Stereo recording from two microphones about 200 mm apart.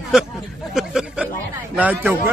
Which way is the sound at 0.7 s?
5° right (ahead or behind).